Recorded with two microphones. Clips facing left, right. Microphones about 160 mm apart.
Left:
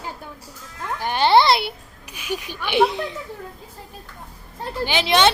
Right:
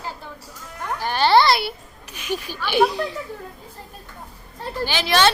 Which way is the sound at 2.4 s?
20° left (ahead or behind).